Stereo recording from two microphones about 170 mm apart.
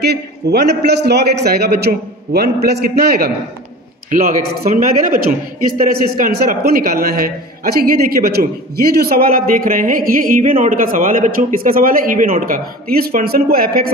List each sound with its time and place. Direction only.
0.0 s a man's voice: 75° right (ahead or behind)
4.1 s a woman's voice: 50° right (ahead or behind)